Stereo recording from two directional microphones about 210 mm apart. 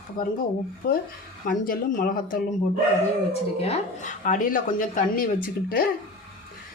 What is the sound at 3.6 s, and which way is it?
Speech, 30° left (ahead or behind).